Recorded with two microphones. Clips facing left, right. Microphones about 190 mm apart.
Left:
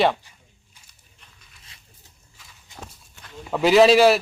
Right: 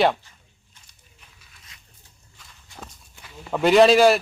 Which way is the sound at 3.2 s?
Centre (ahead or behind).